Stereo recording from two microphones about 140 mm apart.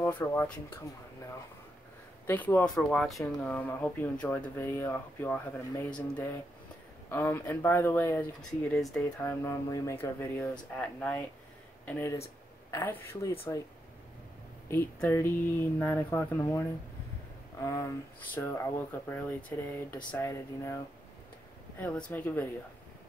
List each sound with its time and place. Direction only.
0.0 s speech: 15° left (ahead or behind)
2.2 s speech: 15° left (ahead or behind)
9.2 s speech: 15° left (ahead or behind)
14.7 s speech: 15° left (ahead or behind)
17.6 s speech: 25° left (ahead or behind)